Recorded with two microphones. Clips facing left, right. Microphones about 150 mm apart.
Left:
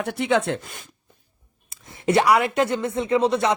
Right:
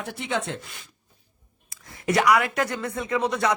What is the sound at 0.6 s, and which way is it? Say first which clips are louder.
Speech: left 4 dB; 45° left (ahead or behind).